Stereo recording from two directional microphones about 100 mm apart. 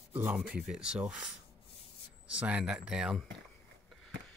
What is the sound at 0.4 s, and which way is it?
Speech, 5° right (ahead or behind).